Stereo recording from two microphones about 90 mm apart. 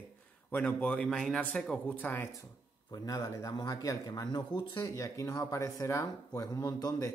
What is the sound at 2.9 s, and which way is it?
Speech, 40° left (ahead or behind).